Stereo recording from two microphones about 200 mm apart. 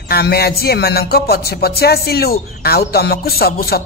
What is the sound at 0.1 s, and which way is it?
Speech, 50° left (ahead or behind).